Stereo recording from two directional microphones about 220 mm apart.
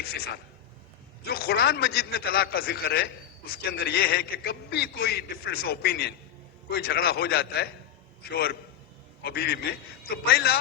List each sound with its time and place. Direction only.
1.2 s a man's voice: 45° left (ahead or behind)